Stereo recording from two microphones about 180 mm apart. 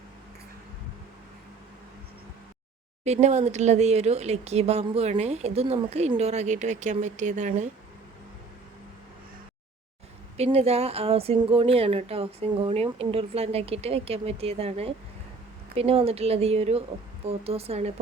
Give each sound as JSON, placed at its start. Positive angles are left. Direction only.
{"t": 3.0, "sound": "speech", "side_deg": -40}
{"t": 10.3, "sound": "speech", "side_deg": -35}